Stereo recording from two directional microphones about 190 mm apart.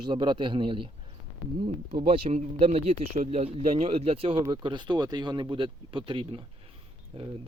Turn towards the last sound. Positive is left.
turn(degrees=-30)  # may be behind; listen again after turning